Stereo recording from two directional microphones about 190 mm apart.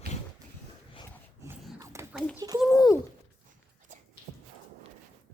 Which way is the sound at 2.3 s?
20° right (ahead or behind).